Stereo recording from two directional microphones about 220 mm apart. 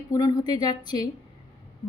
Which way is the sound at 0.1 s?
15° left (ahead or behind).